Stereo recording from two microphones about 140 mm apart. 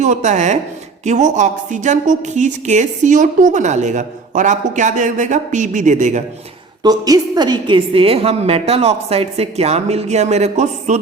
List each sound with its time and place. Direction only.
0.0 s a woman's voice: 60° right (ahead or behind)
6.8 s a woman's voice: 25° right (ahead or behind); by 11.0 s 55° right (ahead or behind)